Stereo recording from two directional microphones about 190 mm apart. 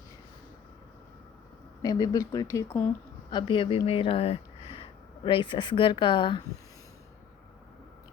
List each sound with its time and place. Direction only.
1.8 s speech: 20° left (ahead or behind)